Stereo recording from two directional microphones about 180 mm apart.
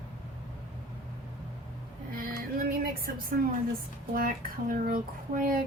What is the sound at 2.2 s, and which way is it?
Speech, 50° right (ahead or behind).